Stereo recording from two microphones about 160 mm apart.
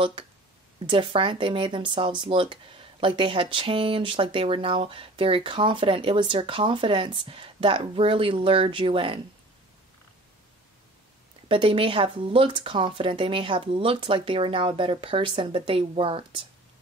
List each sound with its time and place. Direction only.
0.8 s speech: 35° right (ahead or behind)
11.4 s speech: 35° right (ahead or behind)